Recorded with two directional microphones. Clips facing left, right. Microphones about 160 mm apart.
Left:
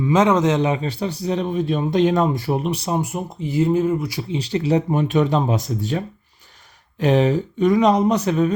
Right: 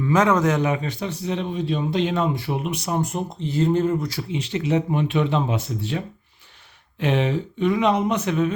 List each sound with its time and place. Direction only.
0.0 s a man's voice: 20° left (ahead or behind)
3.0 s speech: 5° left (ahead or behind)
4.2 s a man's voice: 35° left (ahead or behind)
7.0 s a man's voice: 40° left (ahead or behind)